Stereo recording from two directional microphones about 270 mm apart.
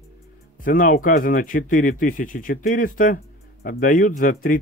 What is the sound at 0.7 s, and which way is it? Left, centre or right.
Speech, left.